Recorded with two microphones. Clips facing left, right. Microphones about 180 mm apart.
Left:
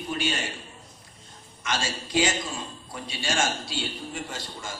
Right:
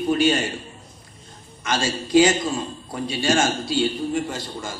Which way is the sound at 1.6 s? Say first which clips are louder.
Right 6 dB; 40° right (ahead or behind).